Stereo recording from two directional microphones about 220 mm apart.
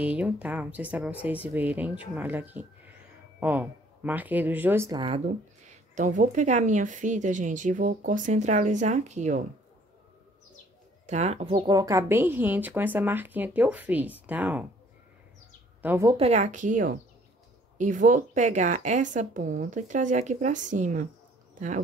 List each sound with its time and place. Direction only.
0.0 s a woman's voice: 5° right (ahead or behind); by 9.4 s 30° right (ahead or behind)
11.1 s a woman's voice: 30° right (ahead or behind); by 14.7 s 5° right (ahead or behind)
15.8 s a woman's voice: 10° right (ahead or behind)
16.2 s speech: 30° right (ahead or behind)